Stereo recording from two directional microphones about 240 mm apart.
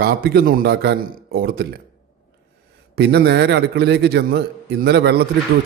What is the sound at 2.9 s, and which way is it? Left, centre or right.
A man's voice, right.